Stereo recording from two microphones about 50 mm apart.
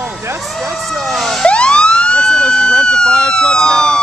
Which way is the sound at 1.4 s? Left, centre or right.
Left.